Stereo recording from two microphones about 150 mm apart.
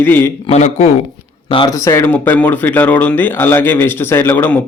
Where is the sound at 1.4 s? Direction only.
35° left (ahead or behind).